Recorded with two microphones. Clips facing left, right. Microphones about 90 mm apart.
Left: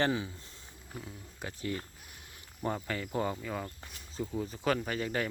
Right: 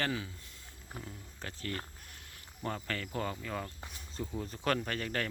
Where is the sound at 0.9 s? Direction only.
5° left (ahead or behind).